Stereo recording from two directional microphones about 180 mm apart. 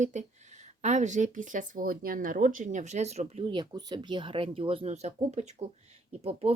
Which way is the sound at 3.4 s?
25° right (ahead or behind).